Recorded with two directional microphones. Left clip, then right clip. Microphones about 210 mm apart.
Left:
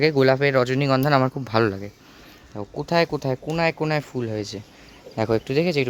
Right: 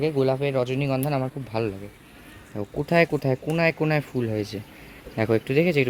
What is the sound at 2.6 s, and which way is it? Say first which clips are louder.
Speech: even; centre (ahead or behind).